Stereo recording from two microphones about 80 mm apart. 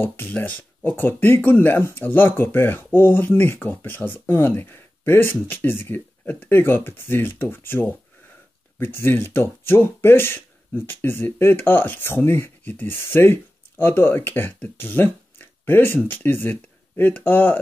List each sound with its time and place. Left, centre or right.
0.0 s speech: left